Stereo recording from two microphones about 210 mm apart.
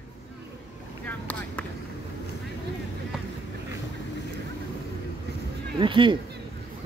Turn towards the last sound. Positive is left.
turn(degrees=-25)  # may be behind; listen again after turning